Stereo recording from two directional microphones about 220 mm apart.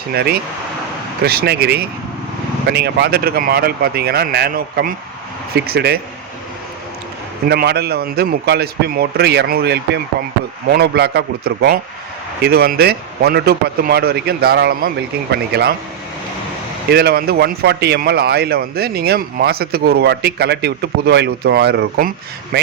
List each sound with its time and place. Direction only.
0.1 s a man's voice: 45° right (ahead or behind)
7.4 s a man's voice: 45° right (ahead or behind)
16.9 s a man's voice: 45° right (ahead or behind)